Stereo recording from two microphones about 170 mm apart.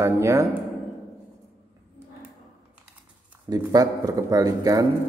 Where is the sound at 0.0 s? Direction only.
15° right (ahead or behind).